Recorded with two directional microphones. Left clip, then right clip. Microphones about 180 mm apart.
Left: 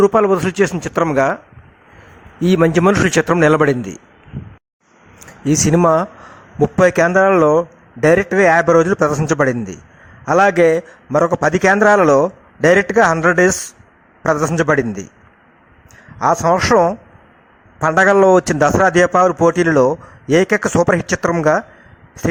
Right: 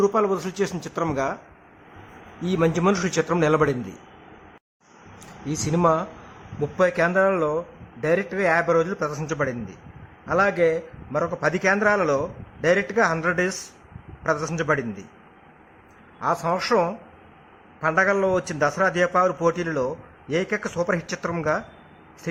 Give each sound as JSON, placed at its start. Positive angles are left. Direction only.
{"t": 0.0, "sound": "a man's voice", "side_deg": 35}
{"t": 2.4, "sound": "a man's voice", "side_deg": 40}
{"t": 5.5, "sound": "a man's voice", "side_deg": 35}
{"t": 16.1, "sound": "a man's voice", "side_deg": 35}